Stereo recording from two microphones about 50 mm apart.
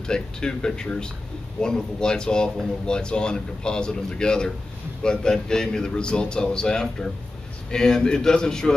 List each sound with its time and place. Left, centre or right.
0.0 s speech: centre